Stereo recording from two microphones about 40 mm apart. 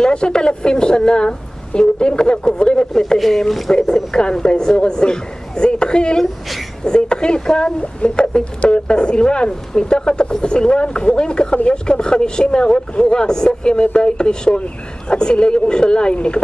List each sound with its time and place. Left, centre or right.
0.0 s speech: left
2.9 s speech: centre
3.9 s speech: centre